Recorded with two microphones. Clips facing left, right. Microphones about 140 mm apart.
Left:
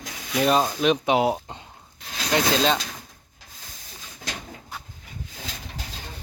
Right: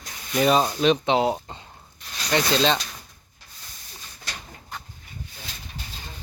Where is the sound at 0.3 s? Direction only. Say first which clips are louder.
Right 1 dB; centre (ahead or behind).